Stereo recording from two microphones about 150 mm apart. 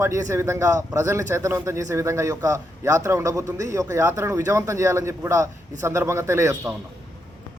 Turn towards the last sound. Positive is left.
turn(degrees=-20)  # may be behind; listen again after turning